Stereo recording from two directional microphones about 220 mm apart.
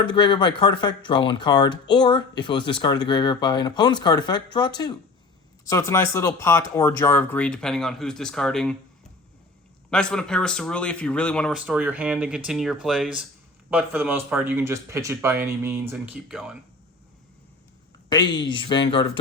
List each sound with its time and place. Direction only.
0.0 s speech: 20° left (ahead or behind); by 8.7 s 5° left (ahead or behind)
9.9 s speech: 5° left (ahead or behind)
18.1 s speech: 20° left (ahead or behind)